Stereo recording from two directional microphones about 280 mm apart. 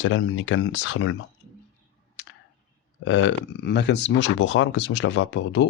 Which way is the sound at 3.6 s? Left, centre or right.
Left.